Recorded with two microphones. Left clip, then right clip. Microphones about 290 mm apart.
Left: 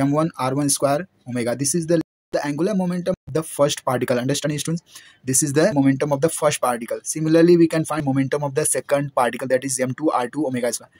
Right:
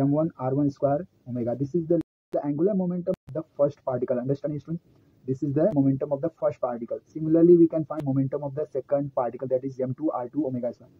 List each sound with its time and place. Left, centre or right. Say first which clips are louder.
0.0 s speech: left 5 dB; left